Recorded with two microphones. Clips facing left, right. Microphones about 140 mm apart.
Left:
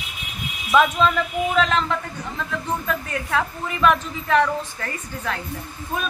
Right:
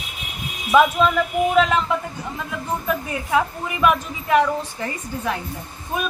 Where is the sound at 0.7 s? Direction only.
10° right (ahead or behind).